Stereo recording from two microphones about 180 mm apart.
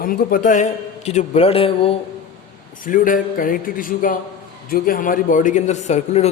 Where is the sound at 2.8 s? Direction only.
50° left (ahead or behind).